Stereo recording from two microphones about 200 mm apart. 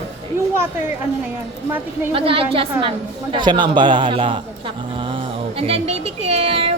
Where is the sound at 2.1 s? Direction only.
25° right (ahead or behind).